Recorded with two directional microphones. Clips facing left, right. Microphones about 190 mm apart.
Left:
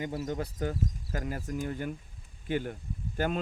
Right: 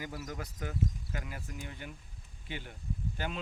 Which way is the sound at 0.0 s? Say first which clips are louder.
Left 8 dB; 25° left (ahead or behind).